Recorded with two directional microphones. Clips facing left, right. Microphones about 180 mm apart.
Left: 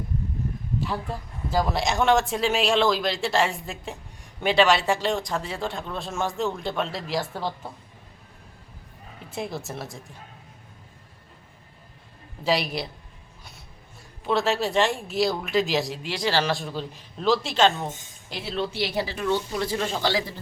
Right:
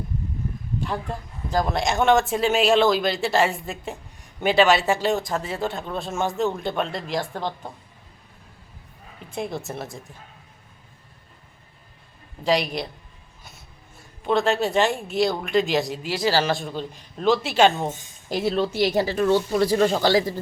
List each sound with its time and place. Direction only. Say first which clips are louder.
0.8 s speech: right 2 dB; 5° left (ahead or behind)
9.3 s speech: right 2 dB; centre (ahead or behind)
12.5 s speech: right 2 dB; 5° left (ahead or behind)
14.3 s speech: right 3 dB; centre (ahead or behind)
18.3 s speech: right 7 dB; 45° right (ahead or behind)